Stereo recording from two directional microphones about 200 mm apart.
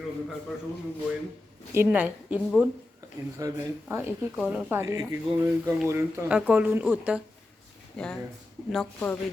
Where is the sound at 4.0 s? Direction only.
5° right (ahead or behind).